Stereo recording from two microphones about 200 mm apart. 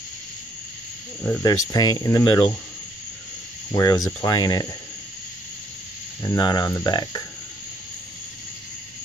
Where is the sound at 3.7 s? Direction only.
15° left (ahead or behind).